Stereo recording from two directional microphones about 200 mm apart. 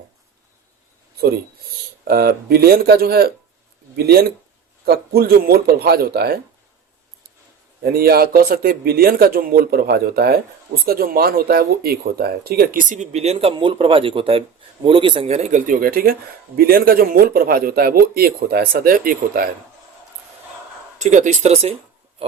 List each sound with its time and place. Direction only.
2.0 s speech: 50° right (ahead or behind)
7.8 s speech: 50° right (ahead or behind)
21.0 s speech: 35° right (ahead or behind)